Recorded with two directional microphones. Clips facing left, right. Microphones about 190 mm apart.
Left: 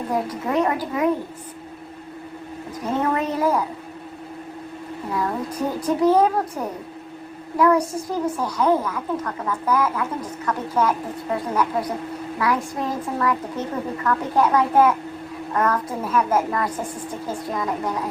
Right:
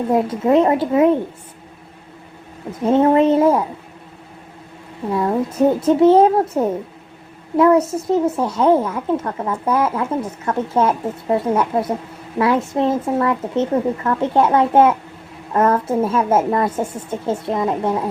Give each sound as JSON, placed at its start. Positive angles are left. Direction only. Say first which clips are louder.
{"t": 0.1, "sound": "a woman's voice", "louder": "right 9 dB", "side_deg": -25}
{"t": 2.8, "sound": "a woman's voice", "louder": "right 10 dB", "side_deg": -25}
{"t": 5.1, "sound": "a woman's voice", "louder": "right 7 dB", "side_deg": -25}